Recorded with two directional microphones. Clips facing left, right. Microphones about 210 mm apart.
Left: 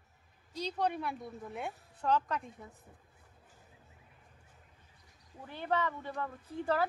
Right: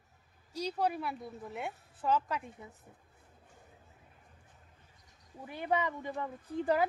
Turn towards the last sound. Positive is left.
turn(degrees=-15)  # may be behind; listen again after turning